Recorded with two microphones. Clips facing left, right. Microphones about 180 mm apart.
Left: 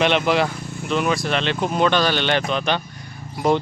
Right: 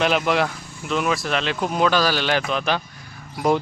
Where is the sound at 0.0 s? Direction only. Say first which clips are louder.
Left 2 dB; centre (ahead or behind).